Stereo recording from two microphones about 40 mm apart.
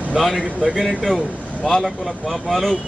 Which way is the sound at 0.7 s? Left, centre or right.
Right.